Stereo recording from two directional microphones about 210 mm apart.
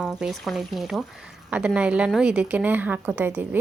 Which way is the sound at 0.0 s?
5° right (ahead or behind).